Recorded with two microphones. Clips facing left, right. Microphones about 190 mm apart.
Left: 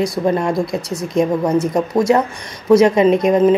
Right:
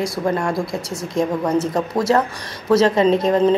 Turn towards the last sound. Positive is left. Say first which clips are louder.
# left 3 dB
turn(degrees=15)  # may be behind; listen again after turning